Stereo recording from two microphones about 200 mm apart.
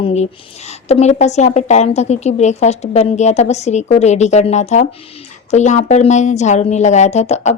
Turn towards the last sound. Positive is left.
turn(degrees=35)  # may be behind; listen again after turning